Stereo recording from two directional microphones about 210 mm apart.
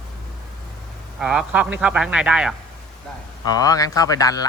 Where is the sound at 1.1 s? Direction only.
5° right (ahead or behind).